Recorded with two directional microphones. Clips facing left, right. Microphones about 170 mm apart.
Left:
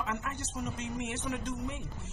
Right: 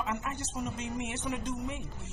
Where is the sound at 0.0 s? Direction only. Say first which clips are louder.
Right 1 dB; 15° right (ahead or behind).